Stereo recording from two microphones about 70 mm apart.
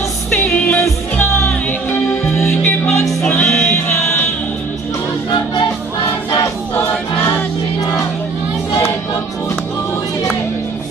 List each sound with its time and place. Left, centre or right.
0.3 s music: left
6.7 s choir: left